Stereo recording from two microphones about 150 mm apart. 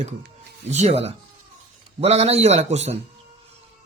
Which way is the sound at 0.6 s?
50° right (ahead or behind).